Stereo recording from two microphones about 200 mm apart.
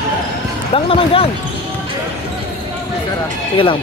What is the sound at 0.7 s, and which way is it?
Speech, 30° left (ahead or behind).